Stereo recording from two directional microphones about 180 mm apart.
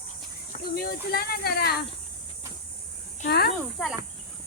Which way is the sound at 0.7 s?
60° left (ahead or behind).